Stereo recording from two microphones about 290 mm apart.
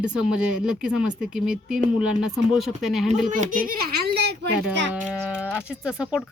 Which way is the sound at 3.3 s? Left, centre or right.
Right.